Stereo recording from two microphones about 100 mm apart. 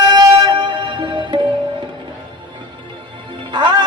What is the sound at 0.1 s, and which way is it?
Music, 50° right (ahead or behind).